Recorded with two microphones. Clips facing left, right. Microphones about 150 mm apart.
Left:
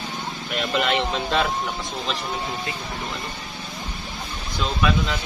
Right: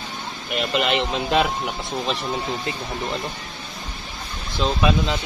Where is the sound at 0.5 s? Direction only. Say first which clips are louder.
Right 1 dB; 15° right (ahead or behind).